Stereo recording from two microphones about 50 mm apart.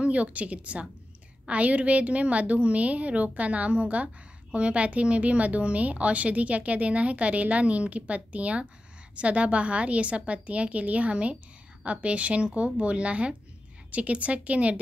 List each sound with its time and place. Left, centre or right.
0.0 s a woman's voice: right